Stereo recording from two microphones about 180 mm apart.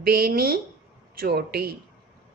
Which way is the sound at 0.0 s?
60° right (ahead or behind).